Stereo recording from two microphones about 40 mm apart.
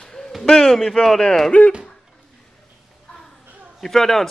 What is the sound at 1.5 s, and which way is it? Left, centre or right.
Speech, left.